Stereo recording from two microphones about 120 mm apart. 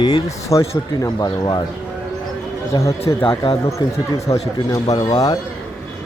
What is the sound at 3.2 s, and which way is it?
Speech, 50° left (ahead or behind).